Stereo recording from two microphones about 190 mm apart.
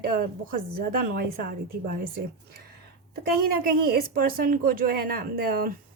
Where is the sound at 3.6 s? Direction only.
50° right (ahead or behind).